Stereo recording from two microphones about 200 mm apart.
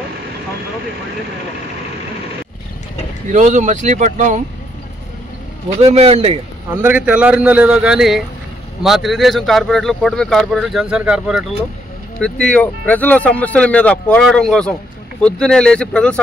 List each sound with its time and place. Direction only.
3.3 s speech: 40° right (ahead or behind)
5.8 s speech: 30° right (ahead or behind)
6.7 s speech: 10° right (ahead or behind); by 16.2 s 5° left (ahead or behind)